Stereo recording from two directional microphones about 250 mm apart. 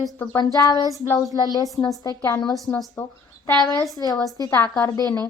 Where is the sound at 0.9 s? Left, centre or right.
Centre.